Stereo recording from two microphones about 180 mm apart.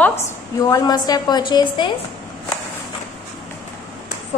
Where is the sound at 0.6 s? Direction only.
20° left (ahead or behind).